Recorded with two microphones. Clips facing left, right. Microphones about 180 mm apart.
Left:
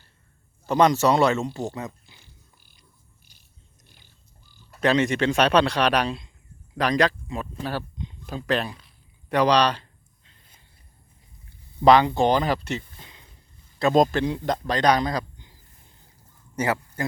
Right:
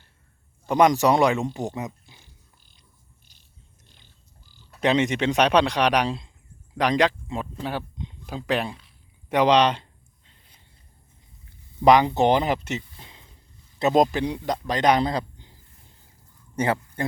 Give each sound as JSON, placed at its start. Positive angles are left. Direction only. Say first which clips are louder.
{"t": 0.7, "sound": "speech", "louder": "right 1 dB", "side_deg": -15}
{"t": 3.8, "sound": "a sound", "louder": "left 2 dB", "side_deg": 10}
{"t": 4.8, "sound": "speech", "louder": "even", "side_deg": -20}
{"t": 11.9, "sound": "speech", "louder": "even", "side_deg": -20}
{"t": 16.6, "sound": "a man's voice", "louder": "right 1 dB", "side_deg": -25}